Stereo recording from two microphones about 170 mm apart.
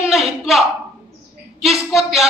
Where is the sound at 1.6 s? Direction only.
Centre (ahead or behind).